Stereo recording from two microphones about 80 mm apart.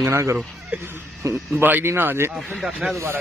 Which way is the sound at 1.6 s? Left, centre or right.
Right.